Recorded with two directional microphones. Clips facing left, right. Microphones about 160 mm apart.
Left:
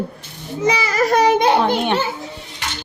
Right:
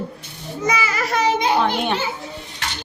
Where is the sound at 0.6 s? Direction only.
30° left (ahead or behind); by 1.4 s 50° left (ahead or behind).